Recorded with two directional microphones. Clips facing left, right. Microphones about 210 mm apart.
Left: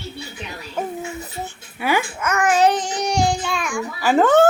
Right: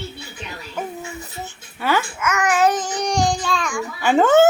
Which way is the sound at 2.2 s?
30° left (ahead or behind).